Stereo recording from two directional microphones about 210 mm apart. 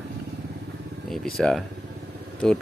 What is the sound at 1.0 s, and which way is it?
Speech, centre (ahead or behind).